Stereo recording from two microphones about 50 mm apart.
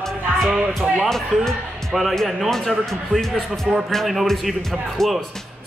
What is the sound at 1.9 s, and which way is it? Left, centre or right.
Speech, centre.